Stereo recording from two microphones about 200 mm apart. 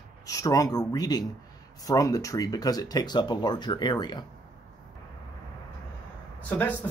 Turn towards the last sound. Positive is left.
turn(degrees=10)  # may be behind; listen again after turning